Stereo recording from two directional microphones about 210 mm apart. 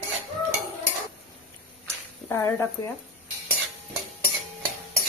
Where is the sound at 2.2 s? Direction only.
10° left (ahead or behind).